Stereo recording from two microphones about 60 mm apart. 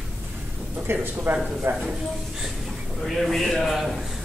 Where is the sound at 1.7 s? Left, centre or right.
Right.